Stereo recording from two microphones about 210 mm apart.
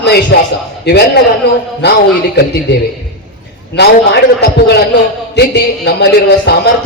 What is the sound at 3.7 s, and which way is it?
A man's voice, 50° left (ahead or behind).